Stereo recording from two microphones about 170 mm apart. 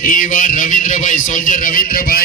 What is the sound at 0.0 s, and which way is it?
A man's voice, 50° left (ahead or behind).